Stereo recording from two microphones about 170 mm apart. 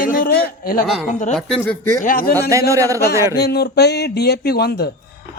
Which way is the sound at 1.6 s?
15° left (ahead or behind).